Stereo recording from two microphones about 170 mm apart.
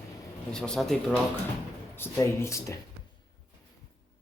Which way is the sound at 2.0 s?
15° left (ahead or behind).